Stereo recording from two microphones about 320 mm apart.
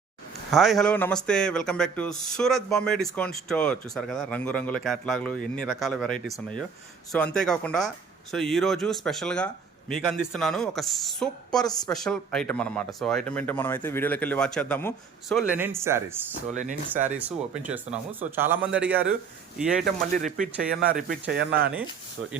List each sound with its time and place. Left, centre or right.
0.5 s a man's voice: centre
20.2 s speech: right